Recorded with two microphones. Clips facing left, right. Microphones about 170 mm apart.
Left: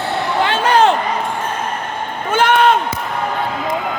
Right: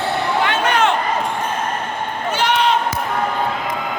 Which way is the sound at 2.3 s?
50° left (ahead or behind).